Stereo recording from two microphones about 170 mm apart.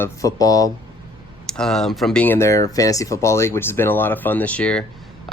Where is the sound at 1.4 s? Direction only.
5° left (ahead or behind).